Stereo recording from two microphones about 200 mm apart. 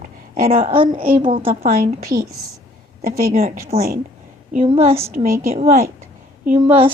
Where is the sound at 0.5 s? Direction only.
30° right (ahead or behind).